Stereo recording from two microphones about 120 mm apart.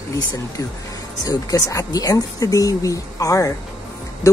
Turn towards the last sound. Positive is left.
turn(degrees=25)  # may be behind; listen again after turning